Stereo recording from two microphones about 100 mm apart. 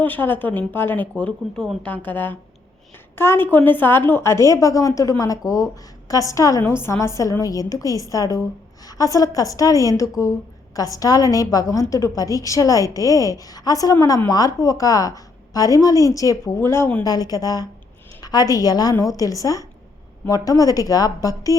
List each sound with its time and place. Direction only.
0.0 s a woman's voice: 20° left (ahead or behind)
1.1 s a woman's voice: 10° left (ahead or behind)
17.0 s a woman's voice: 40° left (ahead or behind)